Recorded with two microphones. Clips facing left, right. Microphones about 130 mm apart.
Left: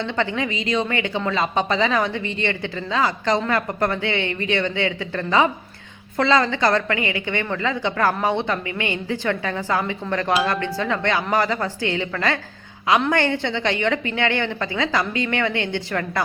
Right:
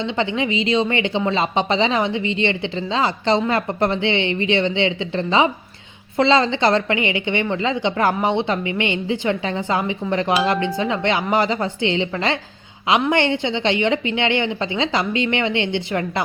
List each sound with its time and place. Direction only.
0.0 s speech: 20° right (ahead or behind)